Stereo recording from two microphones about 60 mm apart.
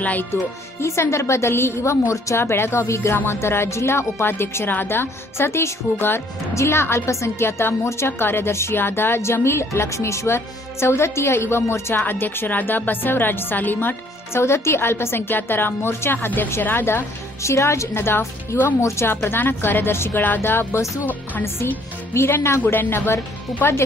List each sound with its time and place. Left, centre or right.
0.0 s speech: left
0.3 s a woman's voice: left
17.4 s speech: left
18.8 s speech: left
19.2 s a woman's voice: left
22.3 s a woman's voice: left